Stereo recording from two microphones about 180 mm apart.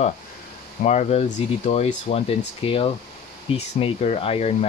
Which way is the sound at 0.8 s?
35° left (ahead or behind).